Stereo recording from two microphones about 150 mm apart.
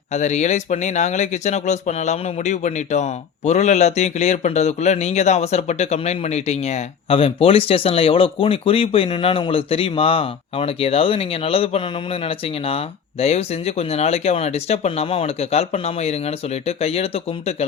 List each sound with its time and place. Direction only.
0.1 s speech: 50° left (ahead or behind)